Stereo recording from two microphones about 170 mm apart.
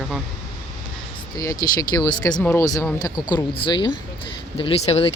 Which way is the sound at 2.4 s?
15° left (ahead or behind).